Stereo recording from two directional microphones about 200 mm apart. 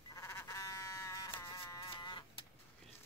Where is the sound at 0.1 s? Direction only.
15° left (ahead or behind).